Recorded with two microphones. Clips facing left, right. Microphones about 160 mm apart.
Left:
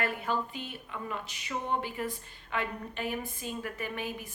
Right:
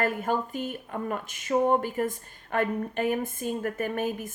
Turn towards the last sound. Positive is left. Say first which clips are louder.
# right 8 dB
turn(degrees=-45)  # may be behind; listen again after turning